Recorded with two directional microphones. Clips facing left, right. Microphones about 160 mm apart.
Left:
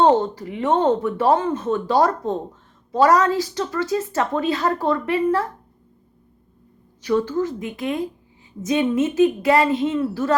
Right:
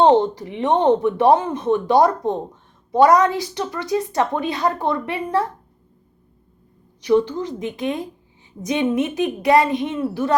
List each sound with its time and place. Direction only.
0.0 s a woman's voice: 20° right (ahead or behind)
7.0 s a woman's voice: 15° right (ahead or behind)